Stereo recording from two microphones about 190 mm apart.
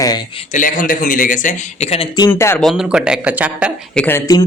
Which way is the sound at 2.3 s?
10° left (ahead or behind).